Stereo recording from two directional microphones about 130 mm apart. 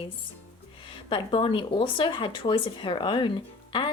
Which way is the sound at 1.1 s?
40° left (ahead or behind).